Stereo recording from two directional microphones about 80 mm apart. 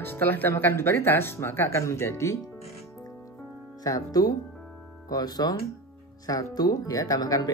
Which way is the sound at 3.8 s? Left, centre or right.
Left.